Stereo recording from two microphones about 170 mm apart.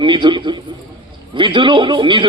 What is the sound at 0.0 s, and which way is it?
A man's voice, 30° right (ahead or behind).